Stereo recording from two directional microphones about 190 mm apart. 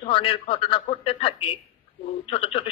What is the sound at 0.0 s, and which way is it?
A man's voice, 30° left (ahead or behind).